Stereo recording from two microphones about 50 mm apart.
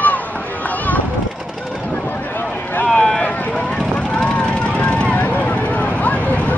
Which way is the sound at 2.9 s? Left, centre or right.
Left.